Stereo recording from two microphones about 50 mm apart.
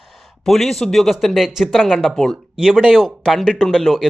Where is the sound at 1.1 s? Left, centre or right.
Centre.